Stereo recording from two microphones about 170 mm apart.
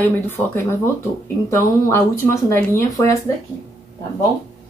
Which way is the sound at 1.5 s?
15° left (ahead or behind).